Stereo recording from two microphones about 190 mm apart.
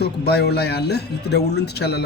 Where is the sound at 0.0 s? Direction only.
60° left (ahead or behind).